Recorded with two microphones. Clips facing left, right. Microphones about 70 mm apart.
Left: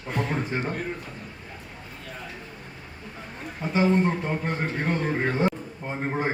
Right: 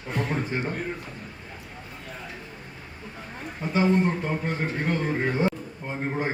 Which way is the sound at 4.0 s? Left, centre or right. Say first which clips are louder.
Even; centre.